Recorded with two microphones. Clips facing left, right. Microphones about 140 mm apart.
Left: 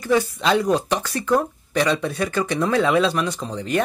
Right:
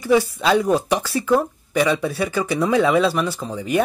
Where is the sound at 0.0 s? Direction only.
10° right (ahead or behind).